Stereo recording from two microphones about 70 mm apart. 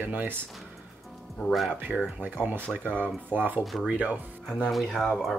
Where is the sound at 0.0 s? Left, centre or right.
Right.